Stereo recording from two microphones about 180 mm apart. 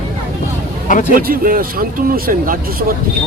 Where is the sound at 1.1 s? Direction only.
50° right (ahead or behind).